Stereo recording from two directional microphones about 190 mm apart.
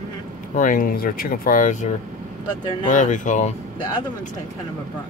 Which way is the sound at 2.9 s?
40° left (ahead or behind).